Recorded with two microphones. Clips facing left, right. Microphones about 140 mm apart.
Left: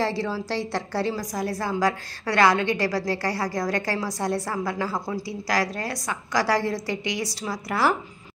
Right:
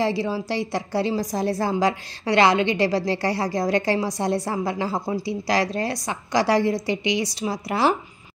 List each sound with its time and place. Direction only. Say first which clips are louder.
0.0 s a woman's voice: right 3 dB; 15° right (ahead or behind)